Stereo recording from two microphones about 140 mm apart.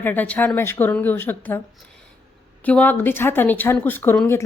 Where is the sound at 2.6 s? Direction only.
10° left (ahead or behind).